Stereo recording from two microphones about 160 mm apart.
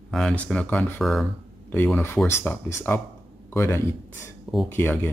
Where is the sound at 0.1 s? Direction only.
5° left (ahead or behind).